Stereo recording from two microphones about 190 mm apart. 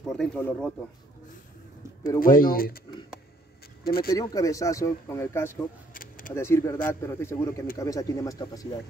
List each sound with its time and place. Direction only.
0.0 s speech: 5° left (ahead or behind)
2.1 s speech: 50° left (ahead or behind)
3.8 s speech: 50° left (ahead or behind)
4.1 s speech: 20° left (ahead or behind)